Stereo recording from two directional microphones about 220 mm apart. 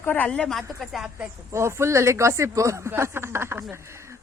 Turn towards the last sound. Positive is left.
turn(degrees=-10)  # may be behind; listen again after turning